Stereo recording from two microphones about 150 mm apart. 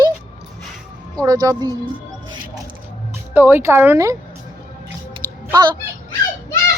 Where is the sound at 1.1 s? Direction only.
25° right (ahead or behind).